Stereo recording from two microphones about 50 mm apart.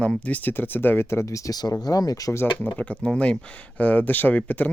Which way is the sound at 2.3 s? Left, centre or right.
Left.